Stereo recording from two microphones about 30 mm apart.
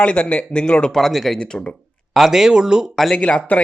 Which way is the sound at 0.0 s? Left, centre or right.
Left.